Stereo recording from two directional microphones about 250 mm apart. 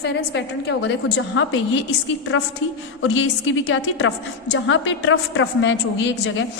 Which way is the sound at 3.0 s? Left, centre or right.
Left.